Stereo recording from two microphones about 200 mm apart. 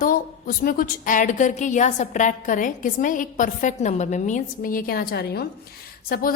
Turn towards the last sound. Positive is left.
turn(degrees=50)  # may be behind; listen again after turning